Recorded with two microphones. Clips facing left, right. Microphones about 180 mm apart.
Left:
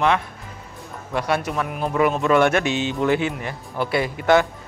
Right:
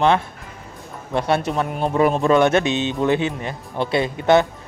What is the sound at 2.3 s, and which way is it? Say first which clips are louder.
Speech: right 2 dB; 20° right (ahead or behind).